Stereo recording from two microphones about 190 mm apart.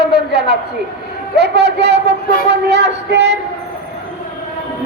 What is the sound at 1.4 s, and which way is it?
A man's voice, 60° right (ahead or behind).